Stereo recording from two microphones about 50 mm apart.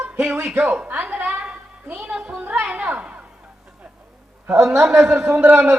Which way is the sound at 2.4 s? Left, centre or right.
Right.